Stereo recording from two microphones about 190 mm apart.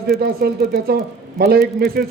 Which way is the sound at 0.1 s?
55° right (ahead or behind).